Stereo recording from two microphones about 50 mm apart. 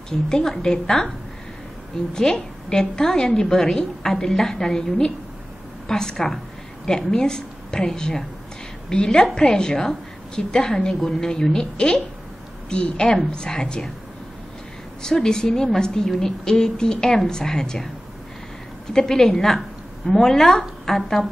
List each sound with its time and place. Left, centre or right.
0.1 s a woman's voice: centre
2.1 s a woman's voice: centre
15.0 s a woman's voice: centre
18.9 s a woman's voice: centre